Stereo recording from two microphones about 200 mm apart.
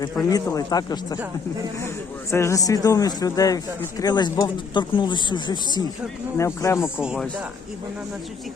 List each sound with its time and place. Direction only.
0.0 s speech: 20° left (ahead or behind)
2.3 s speech: 15° left (ahead or behind)
7.0 s speech: 5° right (ahead or behind)